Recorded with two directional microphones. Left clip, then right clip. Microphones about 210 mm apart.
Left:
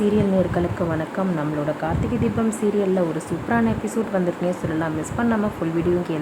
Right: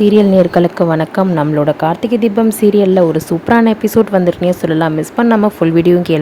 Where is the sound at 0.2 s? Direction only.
35° right (ahead or behind).